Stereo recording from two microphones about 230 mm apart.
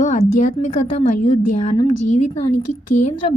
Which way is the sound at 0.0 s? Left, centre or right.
Left.